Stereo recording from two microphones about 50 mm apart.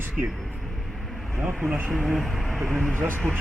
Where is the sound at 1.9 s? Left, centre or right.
Centre.